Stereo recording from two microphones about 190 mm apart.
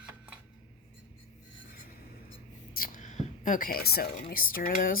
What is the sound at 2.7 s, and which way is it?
Speech, 45° left (ahead or behind).